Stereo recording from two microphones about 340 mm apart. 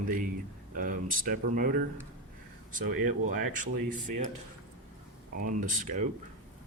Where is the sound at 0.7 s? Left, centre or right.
Right.